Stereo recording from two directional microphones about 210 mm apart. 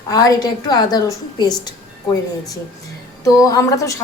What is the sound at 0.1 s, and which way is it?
A woman's voice, 15° left (ahead or behind).